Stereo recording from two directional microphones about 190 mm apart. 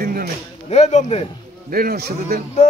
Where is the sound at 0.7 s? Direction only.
35° left (ahead or behind).